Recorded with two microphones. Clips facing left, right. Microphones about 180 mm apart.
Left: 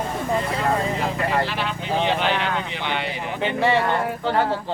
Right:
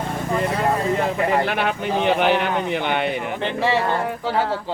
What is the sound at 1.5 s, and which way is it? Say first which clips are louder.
Speech: right 4 dB; 55° right (ahead or behind).